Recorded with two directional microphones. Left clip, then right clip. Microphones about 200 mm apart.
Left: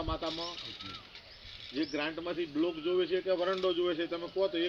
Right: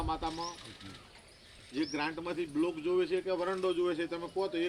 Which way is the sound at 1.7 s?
20° right (ahead or behind).